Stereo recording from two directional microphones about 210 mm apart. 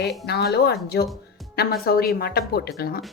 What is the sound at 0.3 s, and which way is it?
A woman's voice, 50° left (ahead or behind).